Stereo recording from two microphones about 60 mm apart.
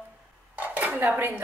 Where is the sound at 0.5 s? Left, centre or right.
Right.